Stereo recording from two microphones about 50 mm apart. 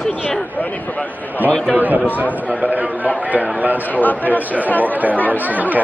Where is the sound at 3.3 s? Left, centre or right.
Right.